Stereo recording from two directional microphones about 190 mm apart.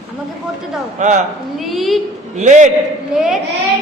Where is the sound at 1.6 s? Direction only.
Centre (ahead or behind).